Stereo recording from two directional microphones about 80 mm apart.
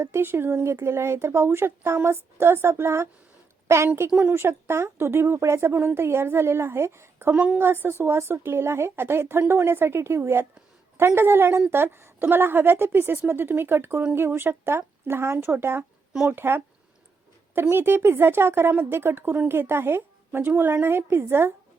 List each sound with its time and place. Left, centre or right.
0.0 s speech: right
7.3 s a woman's voice: centre
7.6 s a woman's voice: right